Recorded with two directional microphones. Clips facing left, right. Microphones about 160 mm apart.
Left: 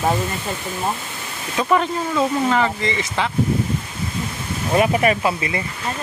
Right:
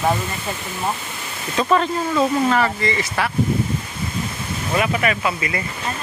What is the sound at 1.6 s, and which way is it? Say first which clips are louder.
Speech: right 1 dB; 15° left (ahead or behind).